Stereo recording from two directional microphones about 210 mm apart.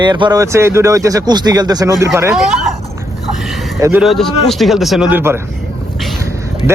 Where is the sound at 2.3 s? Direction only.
Centre (ahead or behind).